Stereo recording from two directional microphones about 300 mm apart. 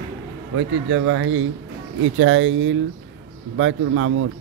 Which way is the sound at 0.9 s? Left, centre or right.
Right.